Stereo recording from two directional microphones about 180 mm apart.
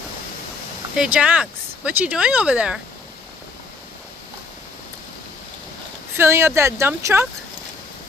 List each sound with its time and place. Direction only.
0.9 s speech: 5° right (ahead or behind)
6.1 s speech: 15° right (ahead or behind)